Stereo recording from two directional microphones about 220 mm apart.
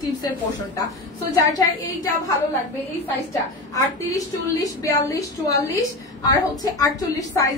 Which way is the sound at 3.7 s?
15° left (ahead or behind).